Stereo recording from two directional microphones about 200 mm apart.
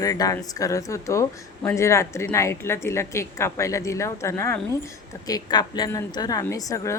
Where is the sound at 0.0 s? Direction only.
15° left (ahead or behind).